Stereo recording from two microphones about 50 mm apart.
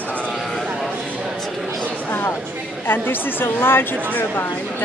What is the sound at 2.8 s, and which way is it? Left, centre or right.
A woman's voice, left.